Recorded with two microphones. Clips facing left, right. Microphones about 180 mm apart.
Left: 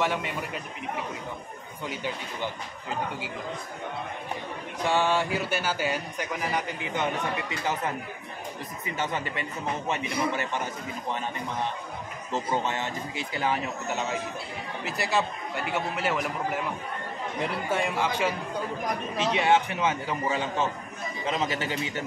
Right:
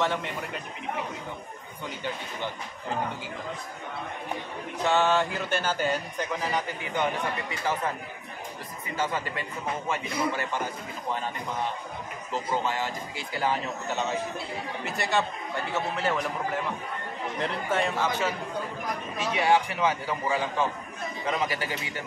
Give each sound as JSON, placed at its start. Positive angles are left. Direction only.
{"t": 0.0, "sound": "speech", "side_deg": 10}
{"t": 4.8, "sound": "speech", "side_deg": 10}
{"t": 9.0, "sound": "a man's voice", "side_deg": 20}
{"t": 12.3, "sound": "a man's voice", "side_deg": 25}
{"t": 14.9, "sound": "a man's voice", "side_deg": 0}